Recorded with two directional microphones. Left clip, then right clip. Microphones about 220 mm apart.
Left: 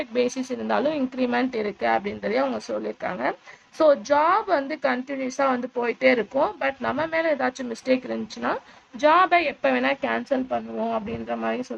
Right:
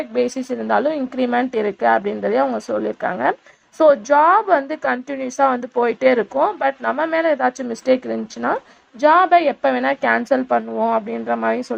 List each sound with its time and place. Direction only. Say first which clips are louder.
0.0 s a woman's voice: right 4 dB; 10° right (ahead or behind)